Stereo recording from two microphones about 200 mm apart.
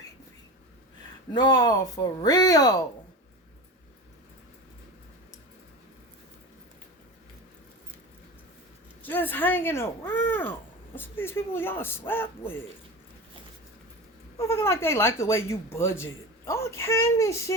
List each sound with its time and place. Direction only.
1.3 s speech: 20° left (ahead or behind)
9.0 s speech: 10° left (ahead or behind)
14.3 s speech: 15° left (ahead or behind)